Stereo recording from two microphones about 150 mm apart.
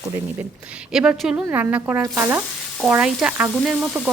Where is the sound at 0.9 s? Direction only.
5° right (ahead or behind).